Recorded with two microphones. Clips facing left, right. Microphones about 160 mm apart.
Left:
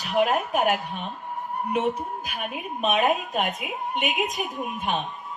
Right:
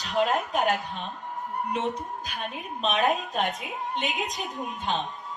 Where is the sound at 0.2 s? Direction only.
10° left (ahead or behind).